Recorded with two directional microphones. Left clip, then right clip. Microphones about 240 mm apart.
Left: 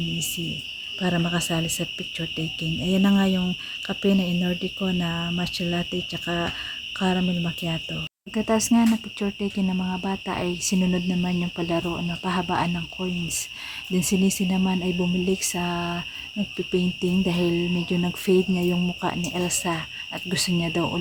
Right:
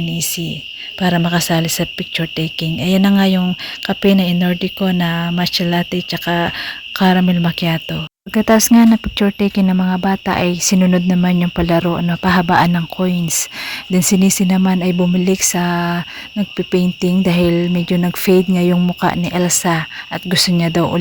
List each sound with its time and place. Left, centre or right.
0.9 s speech: right